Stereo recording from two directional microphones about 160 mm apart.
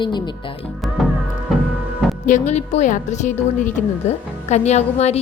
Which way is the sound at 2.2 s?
50° left (ahead or behind).